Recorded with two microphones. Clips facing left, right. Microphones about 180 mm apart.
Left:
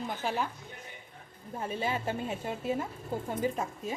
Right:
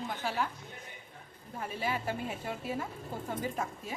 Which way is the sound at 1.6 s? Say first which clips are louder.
Left 2 dB; 25° left (ahead or behind).